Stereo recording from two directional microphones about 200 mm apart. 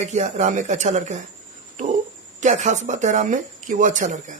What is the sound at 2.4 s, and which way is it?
Speech, 35° right (ahead or behind).